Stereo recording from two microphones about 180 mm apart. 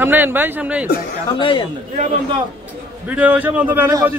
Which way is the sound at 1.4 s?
30° left (ahead or behind).